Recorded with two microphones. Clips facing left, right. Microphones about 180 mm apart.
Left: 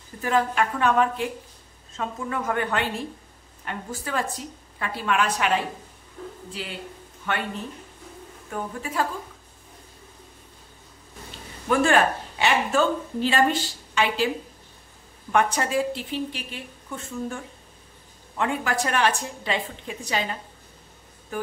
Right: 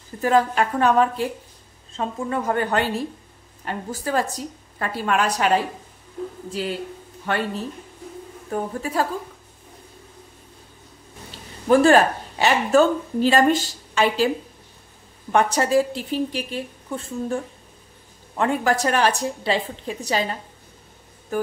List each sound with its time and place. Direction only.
0.2 s speech: 40° right (ahead or behind)
6.6 s speech: 40° right (ahead or behind)
11.6 s speech: 35° right (ahead or behind)
15.3 s speech: 35° right (ahead or behind)
18.4 s speech: 40° right (ahead or behind)